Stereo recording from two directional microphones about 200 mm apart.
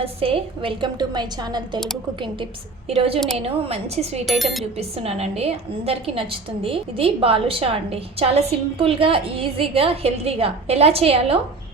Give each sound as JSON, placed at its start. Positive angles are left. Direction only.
{"t": 0.0, "sound": "a woman's voice", "side_deg": -30}
{"t": 2.9, "sound": "a woman's voice", "side_deg": -30}
{"t": 4.3, "sound": "a sound", "side_deg": 0}
{"t": 4.8, "sound": "a woman's voice", "side_deg": -30}